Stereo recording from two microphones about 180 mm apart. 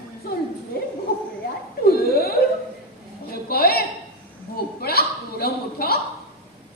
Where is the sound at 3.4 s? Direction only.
60° left (ahead or behind).